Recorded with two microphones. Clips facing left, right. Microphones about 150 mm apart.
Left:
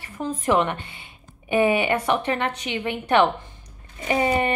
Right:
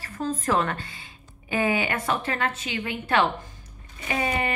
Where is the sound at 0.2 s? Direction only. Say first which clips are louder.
Left 3 dB; 15° left (ahead or behind).